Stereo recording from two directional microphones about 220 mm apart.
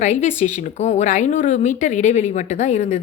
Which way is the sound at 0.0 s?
30° left (ahead or behind).